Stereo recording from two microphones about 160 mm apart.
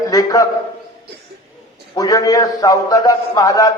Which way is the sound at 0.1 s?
25° left (ahead or behind).